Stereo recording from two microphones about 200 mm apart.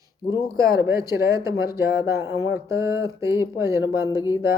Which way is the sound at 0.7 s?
15° right (ahead or behind).